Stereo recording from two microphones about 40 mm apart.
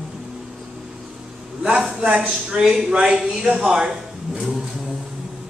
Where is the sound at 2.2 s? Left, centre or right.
Centre.